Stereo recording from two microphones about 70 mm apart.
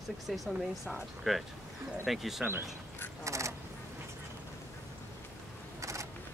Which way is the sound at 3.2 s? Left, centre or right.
Right.